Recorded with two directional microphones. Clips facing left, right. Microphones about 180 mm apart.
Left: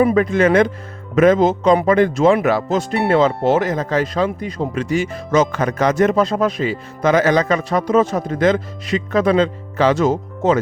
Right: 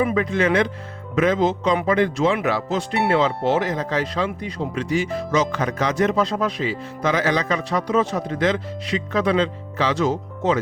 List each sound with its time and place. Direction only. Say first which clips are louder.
0.0 s speech: left 6 dB; 45° left (ahead or behind)